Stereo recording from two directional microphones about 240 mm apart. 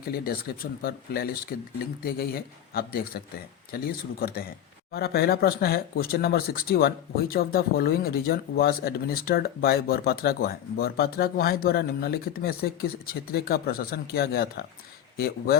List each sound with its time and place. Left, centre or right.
0.0 s speech: left